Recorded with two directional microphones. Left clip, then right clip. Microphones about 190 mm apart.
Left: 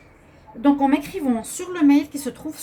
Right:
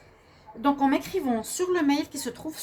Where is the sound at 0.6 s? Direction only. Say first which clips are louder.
Left 5 dB; 50° right (ahead or behind).